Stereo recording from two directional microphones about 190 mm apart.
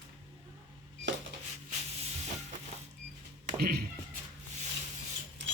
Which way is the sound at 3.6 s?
55° right (ahead or behind).